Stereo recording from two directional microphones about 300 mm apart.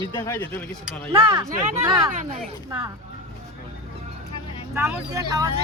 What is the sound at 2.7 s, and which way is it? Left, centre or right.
Speech, centre.